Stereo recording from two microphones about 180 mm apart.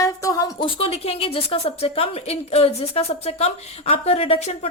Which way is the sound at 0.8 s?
35° left (ahead or behind).